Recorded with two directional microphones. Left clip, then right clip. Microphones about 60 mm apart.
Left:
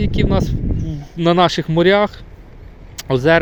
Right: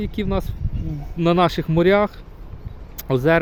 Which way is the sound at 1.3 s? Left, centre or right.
Centre.